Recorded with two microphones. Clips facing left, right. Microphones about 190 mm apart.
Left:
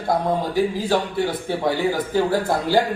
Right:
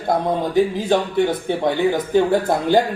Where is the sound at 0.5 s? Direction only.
20° right (ahead or behind).